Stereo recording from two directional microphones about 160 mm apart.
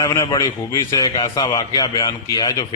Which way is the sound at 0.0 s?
20° left (ahead or behind).